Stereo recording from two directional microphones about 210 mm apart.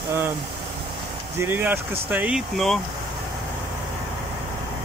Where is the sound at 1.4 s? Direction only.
10° right (ahead or behind).